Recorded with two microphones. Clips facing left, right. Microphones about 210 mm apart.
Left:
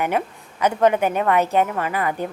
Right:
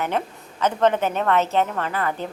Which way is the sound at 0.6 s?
10° left (ahead or behind).